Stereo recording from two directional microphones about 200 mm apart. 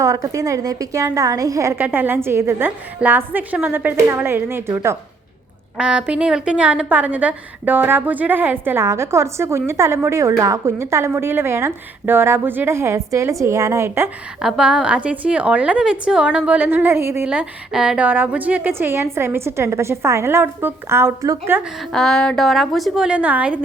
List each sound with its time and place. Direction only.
0.0 s a woman's voice: 15° right (ahead or behind)
14.4 s a woman's voice: centre (ahead or behind)
21.9 s a woman's voice: centre (ahead or behind)